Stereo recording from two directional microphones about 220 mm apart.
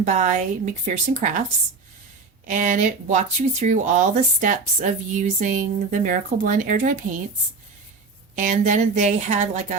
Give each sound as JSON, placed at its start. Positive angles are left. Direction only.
{"t": 0.0, "sound": "speech", "side_deg": -35}
{"t": 2.5, "sound": "speech", "side_deg": -35}
{"t": 8.4, "sound": "speech", "side_deg": -35}